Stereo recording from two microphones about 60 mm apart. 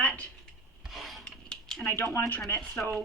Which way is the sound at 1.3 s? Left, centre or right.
Centre.